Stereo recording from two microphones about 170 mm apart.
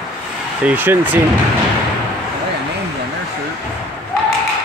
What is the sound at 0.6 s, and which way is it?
Speech, 10° right (ahead or behind).